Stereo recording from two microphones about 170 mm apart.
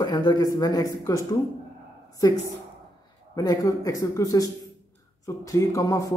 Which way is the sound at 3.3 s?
20° left (ahead or behind).